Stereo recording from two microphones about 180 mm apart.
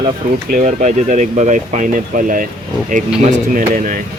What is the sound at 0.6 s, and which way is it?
Speech, 40° right (ahead or behind).